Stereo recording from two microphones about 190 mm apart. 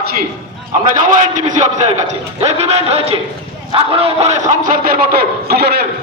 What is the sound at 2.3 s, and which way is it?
A man's voice, 35° right (ahead or behind).